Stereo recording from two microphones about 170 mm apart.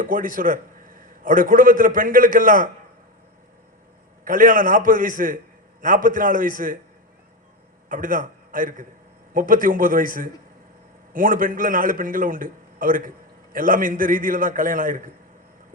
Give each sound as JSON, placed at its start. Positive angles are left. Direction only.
{"t": 0.0, "sound": "a man's voice", "side_deg": -50}
{"t": 4.2, "sound": "a man's voice", "side_deg": -55}
{"t": 7.9, "sound": "a man's voice", "side_deg": -50}